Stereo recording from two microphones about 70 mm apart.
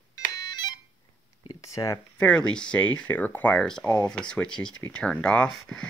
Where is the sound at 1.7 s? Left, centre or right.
Left.